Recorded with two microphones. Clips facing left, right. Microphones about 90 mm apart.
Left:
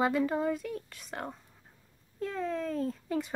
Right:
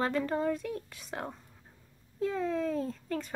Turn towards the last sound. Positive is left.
turn(degrees=10)  # may be behind; listen again after turning